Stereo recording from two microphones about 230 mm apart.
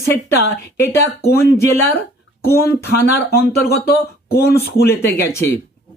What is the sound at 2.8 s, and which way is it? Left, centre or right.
Speech, left.